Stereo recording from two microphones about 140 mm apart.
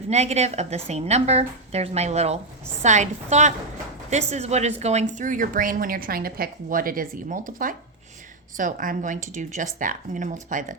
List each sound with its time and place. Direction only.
0.1 s a woman's voice: 50° right (ahead or behind)